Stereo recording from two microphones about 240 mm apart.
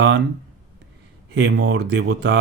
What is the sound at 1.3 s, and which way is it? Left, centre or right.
Speech, right.